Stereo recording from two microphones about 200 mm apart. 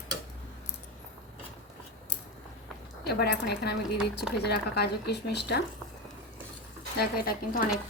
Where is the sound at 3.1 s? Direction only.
55° left (ahead or behind).